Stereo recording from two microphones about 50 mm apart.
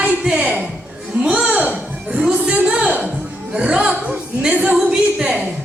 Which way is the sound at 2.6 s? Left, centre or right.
Right.